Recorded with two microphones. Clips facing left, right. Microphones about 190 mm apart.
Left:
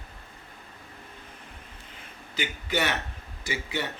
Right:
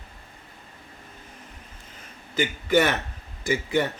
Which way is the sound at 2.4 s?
50° right (ahead or behind).